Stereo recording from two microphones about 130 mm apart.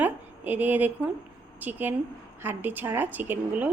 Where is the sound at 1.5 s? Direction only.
15° right (ahead or behind).